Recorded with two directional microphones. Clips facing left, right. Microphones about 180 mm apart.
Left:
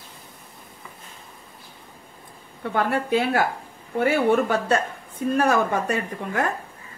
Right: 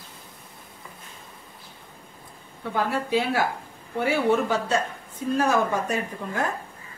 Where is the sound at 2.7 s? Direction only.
55° left (ahead or behind).